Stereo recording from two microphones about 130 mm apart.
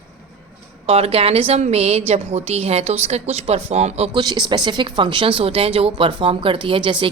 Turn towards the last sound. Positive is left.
turn(degrees=-40)  # may be behind; listen again after turning